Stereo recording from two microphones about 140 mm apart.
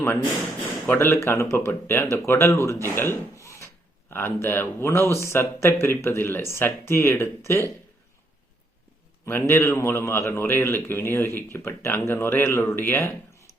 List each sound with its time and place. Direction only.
0.9 s speech: 15° left (ahead or behind)
9.2 s speech: 20° left (ahead or behind)